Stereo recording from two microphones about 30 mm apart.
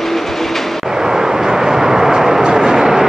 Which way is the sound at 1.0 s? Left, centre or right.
Centre.